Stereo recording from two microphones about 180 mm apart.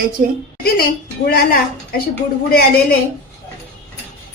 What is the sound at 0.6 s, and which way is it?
Speech, 60° left (ahead or behind).